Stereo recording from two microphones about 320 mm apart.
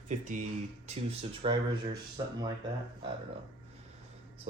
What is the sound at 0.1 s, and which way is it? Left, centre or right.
Speech, right.